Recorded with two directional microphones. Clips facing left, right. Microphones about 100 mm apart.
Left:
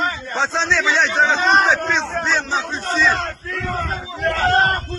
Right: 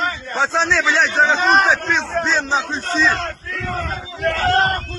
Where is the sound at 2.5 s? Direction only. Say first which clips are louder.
Right 2 dB; 20° right (ahead or behind).